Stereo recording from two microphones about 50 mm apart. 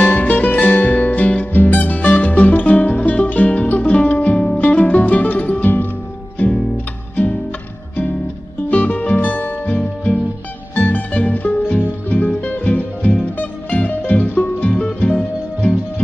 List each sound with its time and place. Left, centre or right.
0.0 s music: left
8.6 s music: left
14.7 s music: centre